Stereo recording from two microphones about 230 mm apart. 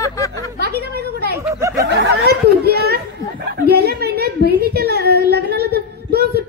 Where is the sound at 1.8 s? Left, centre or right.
Right.